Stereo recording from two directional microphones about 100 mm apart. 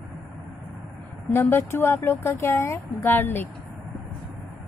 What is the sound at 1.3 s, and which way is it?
Speech, 25° left (ahead or behind).